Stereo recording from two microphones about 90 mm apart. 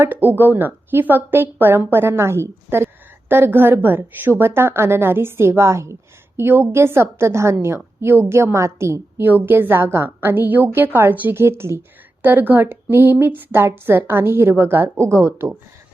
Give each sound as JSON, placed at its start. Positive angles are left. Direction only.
{"t": 0.0, "sound": "a woman's voice", "side_deg": -20}